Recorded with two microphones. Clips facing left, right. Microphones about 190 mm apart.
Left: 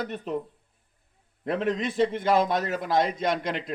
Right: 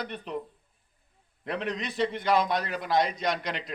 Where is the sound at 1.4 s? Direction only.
45° left (ahead or behind).